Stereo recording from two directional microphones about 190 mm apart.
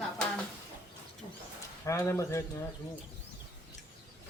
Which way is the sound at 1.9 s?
15° left (ahead or behind).